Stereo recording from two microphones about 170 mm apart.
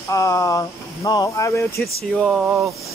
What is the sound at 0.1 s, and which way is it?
Speech, 20° left (ahead or behind).